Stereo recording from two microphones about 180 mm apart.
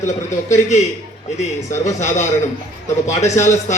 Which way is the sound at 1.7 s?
40° left (ahead or behind).